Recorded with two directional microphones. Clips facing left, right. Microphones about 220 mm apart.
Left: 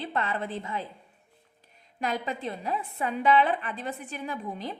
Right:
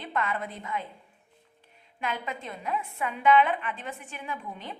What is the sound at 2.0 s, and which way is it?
A woman's voice, 35° left (ahead or behind).